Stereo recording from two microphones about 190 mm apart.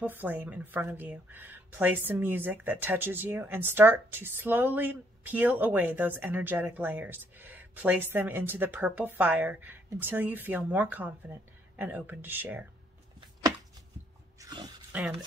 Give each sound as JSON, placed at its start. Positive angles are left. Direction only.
{"t": 0.0, "sound": "speech", "side_deg": -10}
{"t": 14.4, "sound": "a sound", "side_deg": -20}
{"t": 14.9, "sound": "speech", "side_deg": -10}